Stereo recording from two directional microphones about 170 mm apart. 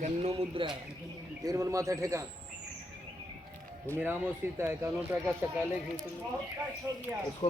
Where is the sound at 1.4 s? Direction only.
20° right (ahead or behind).